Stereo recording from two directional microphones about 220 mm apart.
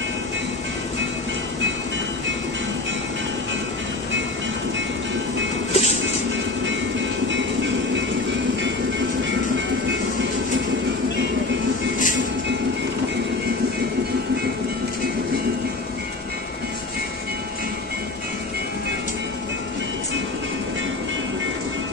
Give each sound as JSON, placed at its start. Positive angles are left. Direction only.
{"t": 5.7, "sound": "music", "side_deg": 30}
{"t": 7.2, "sound": "train", "side_deg": -55}